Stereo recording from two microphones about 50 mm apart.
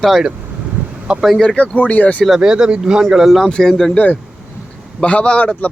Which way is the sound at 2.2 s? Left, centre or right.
Centre.